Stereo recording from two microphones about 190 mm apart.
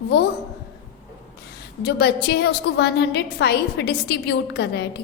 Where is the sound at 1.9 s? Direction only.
60° left (ahead or behind).